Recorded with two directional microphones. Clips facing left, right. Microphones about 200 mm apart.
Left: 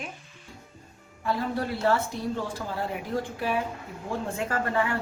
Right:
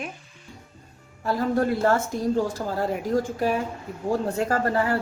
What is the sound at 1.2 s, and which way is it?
Speech, 40° right (ahead or behind).